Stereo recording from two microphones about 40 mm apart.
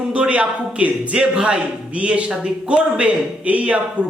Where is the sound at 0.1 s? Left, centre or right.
Right.